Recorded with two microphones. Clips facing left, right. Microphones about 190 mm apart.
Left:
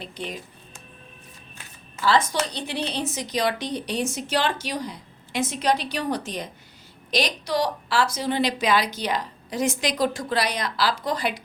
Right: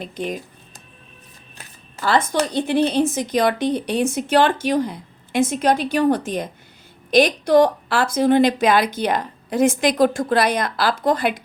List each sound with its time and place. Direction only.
0.0 s a woman's voice: 45° right (ahead or behind)
2.0 s a woman's voice: 55° right (ahead or behind)